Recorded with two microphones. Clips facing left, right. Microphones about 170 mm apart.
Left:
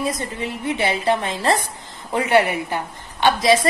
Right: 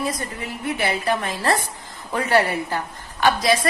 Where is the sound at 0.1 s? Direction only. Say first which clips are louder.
Left 3 dB; 25° left (ahead or behind).